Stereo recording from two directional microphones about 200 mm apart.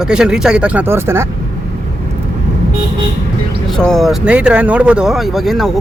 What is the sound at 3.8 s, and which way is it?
Speech, centre (ahead or behind).